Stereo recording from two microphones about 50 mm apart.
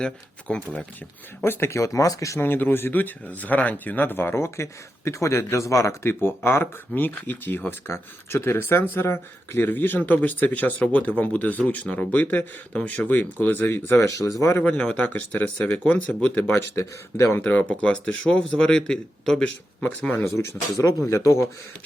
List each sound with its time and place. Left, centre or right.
0.0 s speech: centre
1.5 s speech: left
1.7 s speech: left
2.4 s speech: left
6.2 s speech: left
6.9 s speech: left
7.9 s speech: left
13.9 s speech: left
14.6 s speech: left
15.1 s speech: left
17.7 s speech: left
20.1 s speech: left
21.2 s speech: left